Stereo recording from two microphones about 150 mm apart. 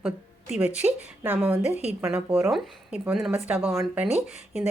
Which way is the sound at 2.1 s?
10° right (ahead or behind).